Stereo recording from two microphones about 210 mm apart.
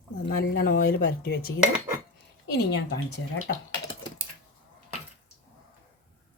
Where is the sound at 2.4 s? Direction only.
50° left (ahead or behind).